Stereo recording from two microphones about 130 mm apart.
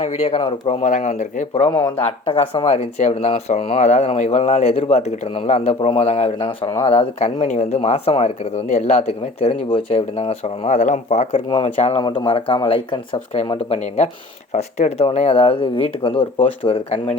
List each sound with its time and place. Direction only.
0.0 s speech: 55° left (ahead or behind)
0.7 s speech: 60° left (ahead or behind)
1.5 s speech: 45° left (ahead or behind)
6.7 s speech: 25° left (ahead or behind)
7.0 s speech: 45° left (ahead or behind); by 11.3 s 65° left (ahead or behind)
11.3 s speech: 40° left (ahead or behind)
11.8 s speech: 50° left (ahead or behind)
12.2 s speech: 40° left (ahead or behind)